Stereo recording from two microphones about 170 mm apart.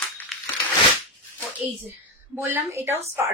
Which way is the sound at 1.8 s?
10° right (ahead or behind).